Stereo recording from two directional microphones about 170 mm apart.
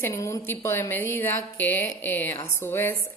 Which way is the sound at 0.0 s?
15° left (ahead or behind).